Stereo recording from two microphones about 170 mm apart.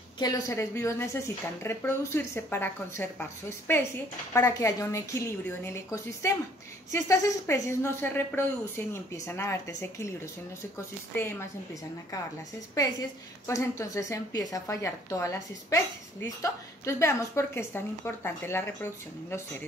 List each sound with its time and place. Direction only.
0.2 s a woman's voice: 20° left (ahead or behind)
11.1 s a woman's voice: 15° left (ahead or behind)
13.5 s a woman's voice: 20° left (ahead or behind)